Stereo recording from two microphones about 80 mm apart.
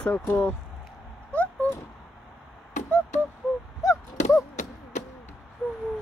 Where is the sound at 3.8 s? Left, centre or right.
Left.